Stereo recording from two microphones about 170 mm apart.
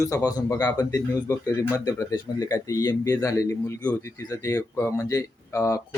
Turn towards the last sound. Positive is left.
turn(degrees=15)  # may be behind; listen again after turning